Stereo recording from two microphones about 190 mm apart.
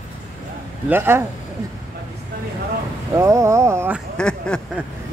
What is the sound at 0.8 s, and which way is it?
Speech, 10° right (ahead or behind).